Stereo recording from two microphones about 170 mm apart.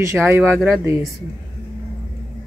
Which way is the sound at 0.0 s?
15° right (ahead or behind).